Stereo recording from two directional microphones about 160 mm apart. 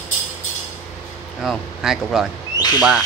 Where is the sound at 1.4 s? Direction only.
Centre (ahead or behind).